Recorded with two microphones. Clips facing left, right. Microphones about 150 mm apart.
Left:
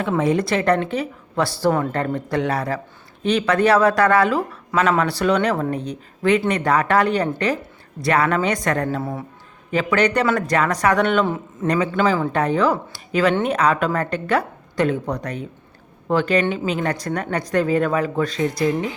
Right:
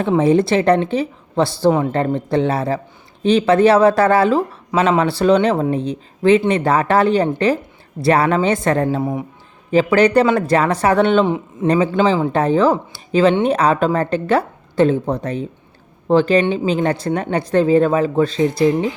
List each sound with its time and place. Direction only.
0.2 s speech: 30° right (ahead or behind)
9.0 s speech: 15° right (ahead or behind)
9.7 s speech: 30° right (ahead or behind)